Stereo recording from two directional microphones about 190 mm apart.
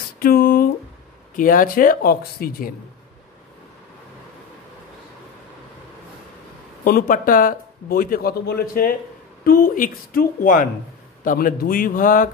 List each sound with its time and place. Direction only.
0.2 s a sound: 50° left (ahead or behind)
1.3 s speech: 45° left (ahead or behind)
6.8 s speech: 50° left (ahead or behind)